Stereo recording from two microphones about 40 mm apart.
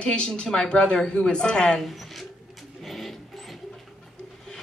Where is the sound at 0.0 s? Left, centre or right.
Left.